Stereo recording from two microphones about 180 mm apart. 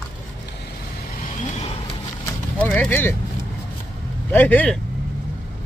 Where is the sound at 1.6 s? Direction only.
35° left (ahead or behind).